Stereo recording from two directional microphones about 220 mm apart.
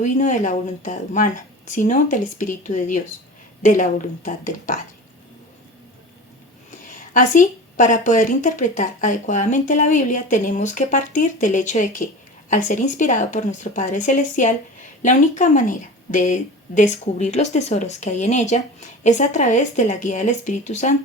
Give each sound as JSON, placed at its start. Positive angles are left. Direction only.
{"t": 0.0, "sound": "speech", "side_deg": 35}
{"t": 6.7, "sound": "speech", "side_deg": 35}